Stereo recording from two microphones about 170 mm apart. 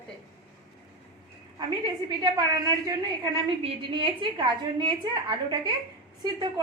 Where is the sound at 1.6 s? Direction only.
25° right (ahead or behind).